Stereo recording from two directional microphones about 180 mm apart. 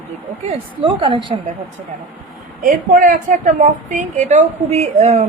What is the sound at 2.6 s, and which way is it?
A woman's voice, 45° right (ahead or behind).